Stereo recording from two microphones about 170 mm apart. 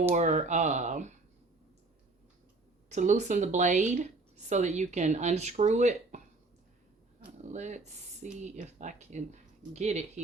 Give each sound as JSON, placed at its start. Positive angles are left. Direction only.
{"t": 0.1, "sound": "a woman's voice", "side_deg": -45}
{"t": 2.9, "sound": "a woman's voice", "side_deg": -45}
{"t": 7.5, "sound": "a woman's voice", "side_deg": -45}